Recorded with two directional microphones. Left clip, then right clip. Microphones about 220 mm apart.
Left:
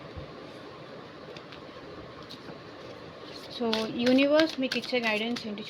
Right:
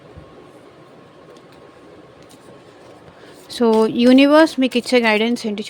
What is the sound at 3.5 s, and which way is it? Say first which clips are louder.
Speech: right 15 dB; 65° right (ahead or behind).